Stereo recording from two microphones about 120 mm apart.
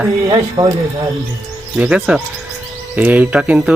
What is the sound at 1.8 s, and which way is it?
Speech, 10° right (ahead or behind).